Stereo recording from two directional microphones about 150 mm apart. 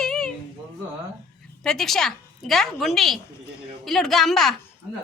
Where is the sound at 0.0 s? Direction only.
5° left (ahead or behind).